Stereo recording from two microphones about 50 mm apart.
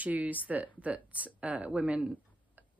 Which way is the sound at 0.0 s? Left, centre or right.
Right.